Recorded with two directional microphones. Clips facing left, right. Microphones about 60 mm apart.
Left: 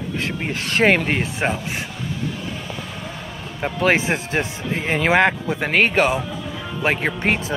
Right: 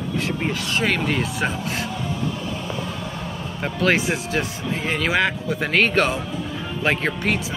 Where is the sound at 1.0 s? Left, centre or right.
Left.